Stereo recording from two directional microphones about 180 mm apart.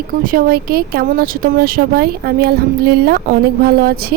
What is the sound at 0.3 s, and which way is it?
Speech, 55° right (ahead or behind).